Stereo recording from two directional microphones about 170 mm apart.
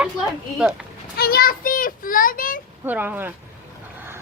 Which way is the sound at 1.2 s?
60° left (ahead or behind).